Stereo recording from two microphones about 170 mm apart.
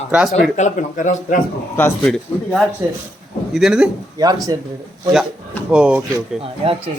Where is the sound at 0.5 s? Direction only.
45° left (ahead or behind).